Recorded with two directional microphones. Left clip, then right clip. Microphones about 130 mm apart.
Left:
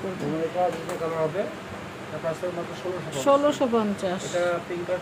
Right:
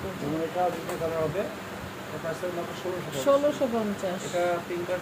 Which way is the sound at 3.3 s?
40° left (ahead or behind).